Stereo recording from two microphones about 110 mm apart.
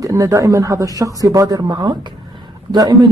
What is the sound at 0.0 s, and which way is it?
Speech, 30° right (ahead or behind).